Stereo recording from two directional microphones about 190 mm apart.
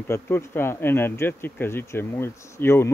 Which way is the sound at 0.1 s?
10° left (ahead or behind).